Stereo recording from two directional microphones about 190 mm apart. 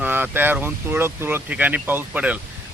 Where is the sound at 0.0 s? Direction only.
10° right (ahead or behind).